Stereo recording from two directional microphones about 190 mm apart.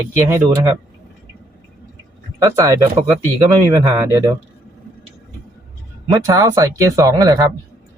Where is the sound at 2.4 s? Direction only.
15° right (ahead or behind).